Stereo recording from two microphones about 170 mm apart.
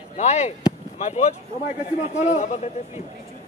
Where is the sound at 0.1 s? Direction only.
40° left (ahead or behind).